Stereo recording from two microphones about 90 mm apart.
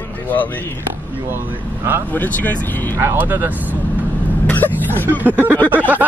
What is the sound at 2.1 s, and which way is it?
Speech, 20° left (ahead or behind).